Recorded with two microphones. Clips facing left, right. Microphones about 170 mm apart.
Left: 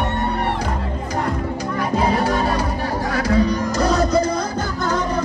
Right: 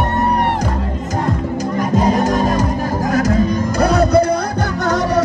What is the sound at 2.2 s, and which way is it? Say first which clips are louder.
Music: right 4 dB; 45° right (ahead or behind).